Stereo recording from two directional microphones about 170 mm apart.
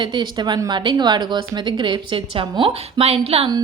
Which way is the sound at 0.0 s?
25° right (ahead or behind).